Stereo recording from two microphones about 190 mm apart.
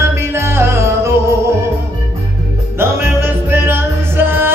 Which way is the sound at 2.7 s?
10° right (ahead or behind).